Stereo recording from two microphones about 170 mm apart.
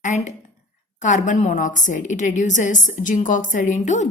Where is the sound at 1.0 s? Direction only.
45° left (ahead or behind).